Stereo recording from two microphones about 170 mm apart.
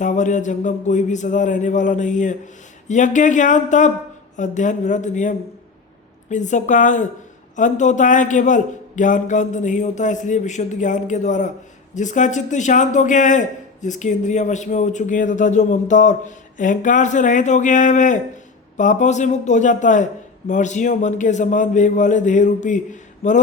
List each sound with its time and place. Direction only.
0.0 s a man's voice: 45° left (ahead or behind)